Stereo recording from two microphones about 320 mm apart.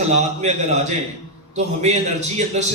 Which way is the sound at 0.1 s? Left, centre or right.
Right.